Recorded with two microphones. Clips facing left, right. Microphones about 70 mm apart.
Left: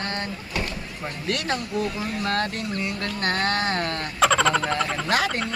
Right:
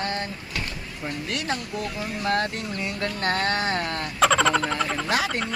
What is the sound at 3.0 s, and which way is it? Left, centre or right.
Speech, right.